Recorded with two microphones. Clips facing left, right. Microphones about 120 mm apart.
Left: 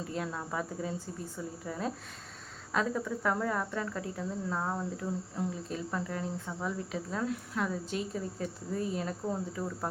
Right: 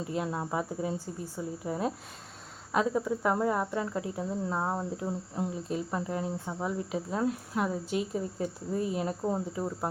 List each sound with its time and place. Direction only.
0.1 s speech: 25° right (ahead or behind)